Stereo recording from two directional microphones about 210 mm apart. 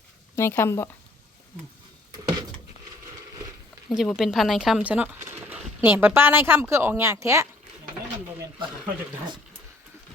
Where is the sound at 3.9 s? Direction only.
Centre (ahead or behind).